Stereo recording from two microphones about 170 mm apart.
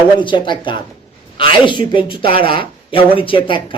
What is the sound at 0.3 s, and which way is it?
Speech, 25° left (ahead or behind).